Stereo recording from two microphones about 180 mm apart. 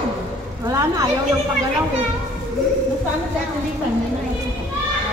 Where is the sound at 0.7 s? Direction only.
20° right (ahead or behind).